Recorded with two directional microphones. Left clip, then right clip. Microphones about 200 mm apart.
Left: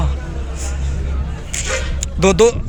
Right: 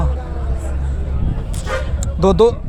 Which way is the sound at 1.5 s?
10° right (ahead or behind).